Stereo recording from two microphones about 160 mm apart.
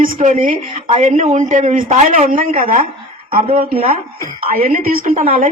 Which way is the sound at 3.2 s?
35° right (ahead or behind).